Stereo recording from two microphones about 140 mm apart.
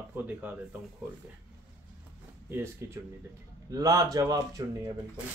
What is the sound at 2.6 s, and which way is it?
A man's voice, 20° right (ahead or behind).